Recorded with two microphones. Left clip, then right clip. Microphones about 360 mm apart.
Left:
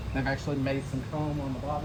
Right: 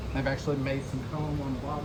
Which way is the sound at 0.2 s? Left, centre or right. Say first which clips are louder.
Right 1 dB; centre.